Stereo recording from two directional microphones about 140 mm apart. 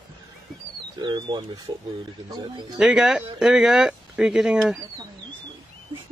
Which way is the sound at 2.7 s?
5° right (ahead or behind).